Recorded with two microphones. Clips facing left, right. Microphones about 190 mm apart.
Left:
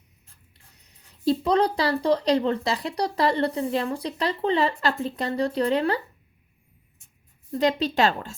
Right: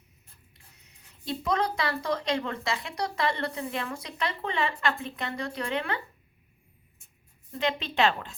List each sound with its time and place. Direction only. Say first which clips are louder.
0.7 s speech: left 1 dB; 35° left (ahead or behind)
7.5 s speech: left 6 dB; 40° left (ahead or behind)